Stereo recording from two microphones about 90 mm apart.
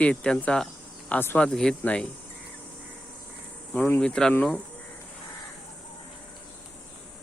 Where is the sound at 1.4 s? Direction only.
5° left (ahead or behind).